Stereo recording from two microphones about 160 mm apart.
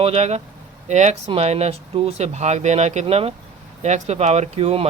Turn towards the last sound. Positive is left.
turn(degrees=-40)  # may be behind; listen again after turning